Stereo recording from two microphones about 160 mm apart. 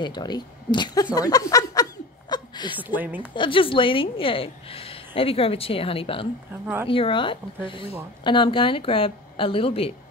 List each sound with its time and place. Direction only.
0.0 s speech: 25° left (ahead or behind)
1.1 s snicker: 20° left (ahead or behind)
2.8 s a woman's voice: 10° right (ahead or behind)
3.3 s a woman's voice: 35° left (ahead or behind)
6.6 s a woman's voice: 15° right (ahead or behind)
6.9 s a woman's voice: 35° left (ahead or behind)